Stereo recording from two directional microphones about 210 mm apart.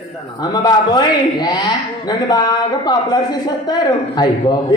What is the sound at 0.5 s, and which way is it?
A man's voice, 20° left (ahead or behind).